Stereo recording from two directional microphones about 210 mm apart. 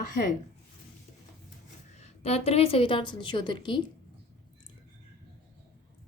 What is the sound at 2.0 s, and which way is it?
A woman's voice, 30° left (ahead or behind).